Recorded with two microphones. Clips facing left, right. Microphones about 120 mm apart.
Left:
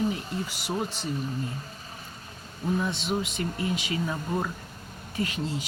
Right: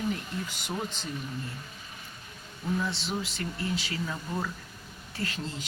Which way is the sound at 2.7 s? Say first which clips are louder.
Left 3 dB; 20° left (ahead or behind).